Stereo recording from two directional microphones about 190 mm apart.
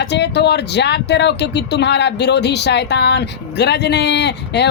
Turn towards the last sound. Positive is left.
turn(degrees=65)  # may be behind; listen again after turning